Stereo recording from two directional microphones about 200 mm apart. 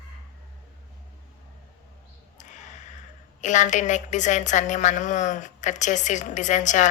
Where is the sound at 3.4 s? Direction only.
40° left (ahead or behind).